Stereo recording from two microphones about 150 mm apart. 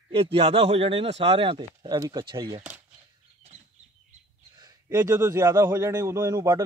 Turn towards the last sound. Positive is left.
turn(degrees=-25)  # may be behind; listen again after turning